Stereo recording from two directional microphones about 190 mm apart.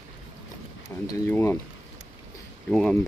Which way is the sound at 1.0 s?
15° left (ahead or behind).